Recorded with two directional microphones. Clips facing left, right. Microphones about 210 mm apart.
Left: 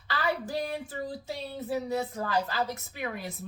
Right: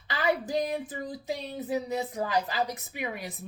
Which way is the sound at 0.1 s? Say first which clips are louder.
Right 3 dB; 20° right (ahead or behind).